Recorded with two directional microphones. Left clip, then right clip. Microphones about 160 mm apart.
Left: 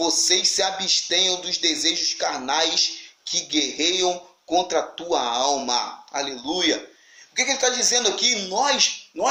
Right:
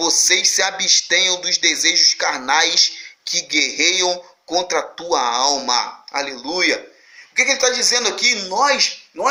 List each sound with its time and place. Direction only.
0.0 s speech: 15° left (ahead or behind)